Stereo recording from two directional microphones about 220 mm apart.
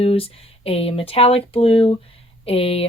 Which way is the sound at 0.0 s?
25° left (ahead or behind).